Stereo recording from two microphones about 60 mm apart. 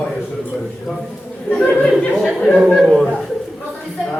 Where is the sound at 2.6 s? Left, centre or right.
Centre.